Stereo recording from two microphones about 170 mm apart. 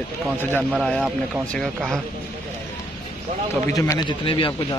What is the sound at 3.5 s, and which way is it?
A man's voice, 20° left (ahead or behind).